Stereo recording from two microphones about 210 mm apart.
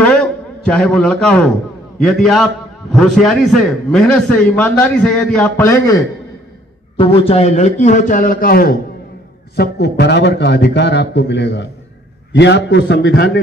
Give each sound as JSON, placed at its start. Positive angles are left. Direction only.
{"t": 0.0, "sound": "a sound", "side_deg": 5}
{"t": 2.0, "sound": "a man's voice", "side_deg": 0}
{"t": 7.0, "sound": "a man's voice", "side_deg": 30}